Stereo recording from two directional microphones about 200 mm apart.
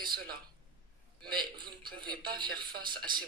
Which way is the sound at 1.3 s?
20° right (ahead or behind).